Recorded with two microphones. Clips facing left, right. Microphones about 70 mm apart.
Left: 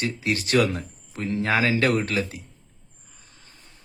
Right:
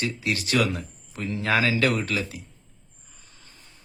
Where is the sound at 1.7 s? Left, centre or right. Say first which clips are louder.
Left 2 dB; left.